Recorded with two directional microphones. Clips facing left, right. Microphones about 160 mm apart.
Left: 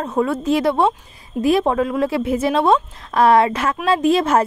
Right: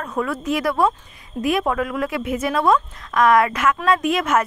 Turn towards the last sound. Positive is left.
turn(degrees=30)  # may be behind; listen again after turning